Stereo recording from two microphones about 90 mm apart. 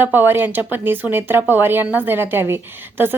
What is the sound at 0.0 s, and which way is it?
Speech, 20° right (ahead or behind).